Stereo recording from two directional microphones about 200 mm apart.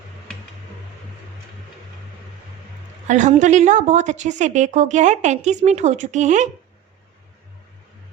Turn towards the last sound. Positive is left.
turn(degrees=-35)  # may be behind; listen again after turning